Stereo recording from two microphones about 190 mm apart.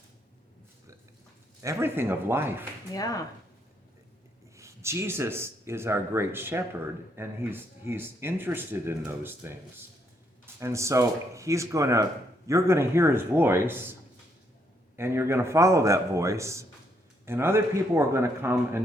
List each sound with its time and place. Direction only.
1.6 s speech: 15° right (ahead or behind)
2.9 s speech: 20° left (ahead or behind)
4.5 s speech: 15° right (ahead or behind)
14.9 s speech: 15° right (ahead or behind)